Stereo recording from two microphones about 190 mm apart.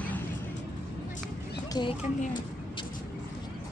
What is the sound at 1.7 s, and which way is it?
Speech, 25° left (ahead or behind).